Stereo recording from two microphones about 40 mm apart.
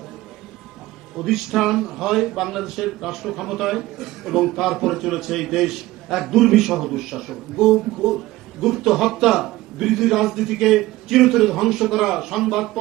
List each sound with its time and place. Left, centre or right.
1.1 s a man's voice: centre